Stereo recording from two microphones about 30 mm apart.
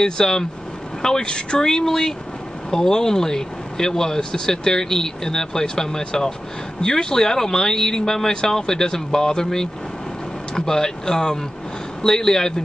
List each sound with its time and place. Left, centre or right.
0.0 s speech: centre
1.9 s speech: centre